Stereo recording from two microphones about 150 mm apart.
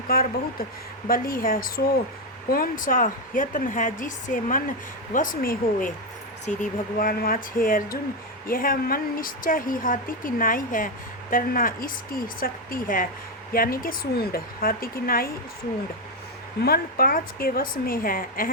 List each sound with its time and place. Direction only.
0.1 s a woman's voice: 80° left
6.4 s speech: 55° left (ahead or behind)
7.0 s a woman's voice: 80° left
16.6 s a woman's voice: 90° left; by 18.5 s 70° left (ahead or behind)